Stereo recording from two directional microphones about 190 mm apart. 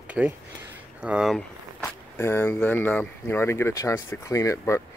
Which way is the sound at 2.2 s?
15° left (ahead or behind).